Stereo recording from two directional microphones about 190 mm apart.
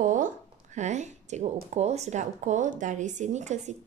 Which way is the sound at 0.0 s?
40° right (ahead or behind).